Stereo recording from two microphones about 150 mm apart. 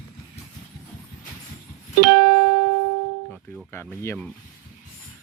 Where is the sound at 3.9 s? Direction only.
15° left (ahead or behind).